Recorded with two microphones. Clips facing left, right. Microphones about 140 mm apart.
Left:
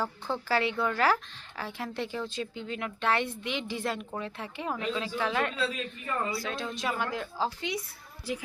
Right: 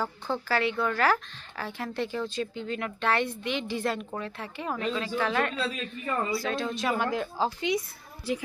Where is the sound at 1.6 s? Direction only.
10° left (ahead or behind).